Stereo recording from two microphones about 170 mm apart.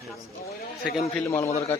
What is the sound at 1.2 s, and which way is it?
Speech, 15° left (ahead or behind).